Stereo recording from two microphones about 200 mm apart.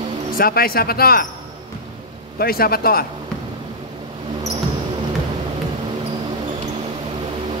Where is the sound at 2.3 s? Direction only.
50° left (ahead or behind).